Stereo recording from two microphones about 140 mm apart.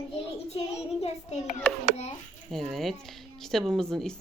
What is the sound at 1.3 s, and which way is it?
Speech, 50° left (ahead or behind).